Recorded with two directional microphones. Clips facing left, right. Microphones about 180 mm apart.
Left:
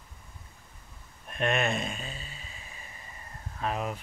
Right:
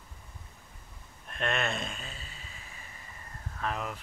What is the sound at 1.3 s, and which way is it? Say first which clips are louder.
Speech: left 4 dB; 15° left (ahead or behind).